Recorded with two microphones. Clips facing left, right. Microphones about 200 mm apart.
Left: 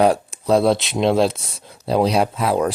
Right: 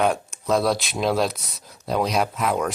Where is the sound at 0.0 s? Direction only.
35° left (ahead or behind).